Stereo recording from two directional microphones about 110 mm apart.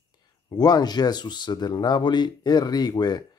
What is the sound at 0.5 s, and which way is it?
Speech, 35° left (ahead or behind).